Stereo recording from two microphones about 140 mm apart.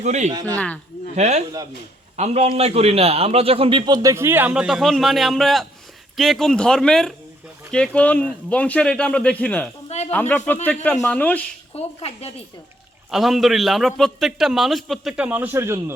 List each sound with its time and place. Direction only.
0.0 s speech: 55° right (ahead or behind)
0.5 s speech: 10° left (ahead or behind)
1.1 s a man's voice: 55° right (ahead or behind); by 11.4 s 10° left (ahead or behind)
11.7 s a woman's voice: 45° left (ahead or behind)
13.1 s a man's voice: centre (ahead or behind); by 15.8 s 20° right (ahead or behind)